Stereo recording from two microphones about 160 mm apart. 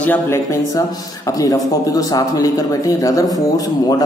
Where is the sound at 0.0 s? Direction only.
15° left (ahead or behind).